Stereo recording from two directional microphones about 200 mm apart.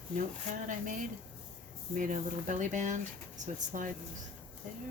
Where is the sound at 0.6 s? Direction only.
40° right (ahead or behind).